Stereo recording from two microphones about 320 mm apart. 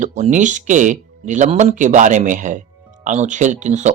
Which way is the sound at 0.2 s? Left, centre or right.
Right.